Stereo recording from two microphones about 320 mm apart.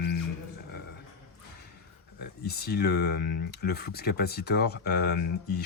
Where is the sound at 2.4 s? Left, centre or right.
Left.